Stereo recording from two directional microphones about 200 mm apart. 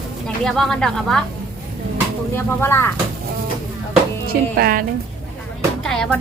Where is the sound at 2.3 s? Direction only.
10° left (ahead or behind).